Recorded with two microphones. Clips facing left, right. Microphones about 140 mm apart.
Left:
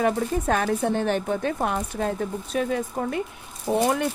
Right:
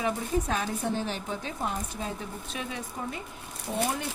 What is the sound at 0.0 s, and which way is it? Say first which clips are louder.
A woman's voice: left 6 dB; 55° left (ahead or behind).